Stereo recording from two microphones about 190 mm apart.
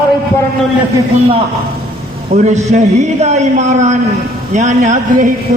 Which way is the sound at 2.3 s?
40° right (ahead or behind).